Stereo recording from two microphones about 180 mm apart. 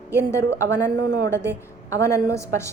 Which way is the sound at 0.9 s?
60° right (ahead or behind).